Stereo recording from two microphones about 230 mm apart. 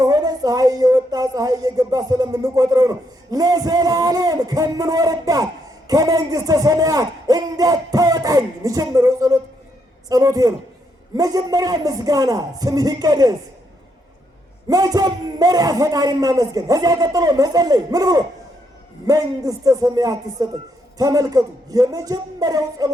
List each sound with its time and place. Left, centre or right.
0.0 s a woman's voice: centre
14.7 s a man's voice: centre